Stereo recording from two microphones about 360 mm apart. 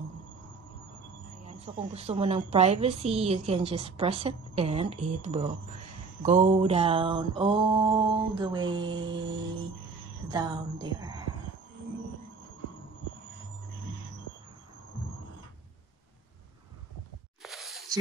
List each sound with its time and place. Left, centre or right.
1.6 s a woman's voice: centre
10.3 s a woman's voice: centre
17.4 s a sound: centre